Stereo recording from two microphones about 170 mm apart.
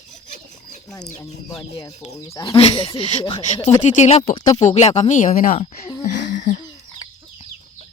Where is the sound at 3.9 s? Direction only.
45° left (ahead or behind).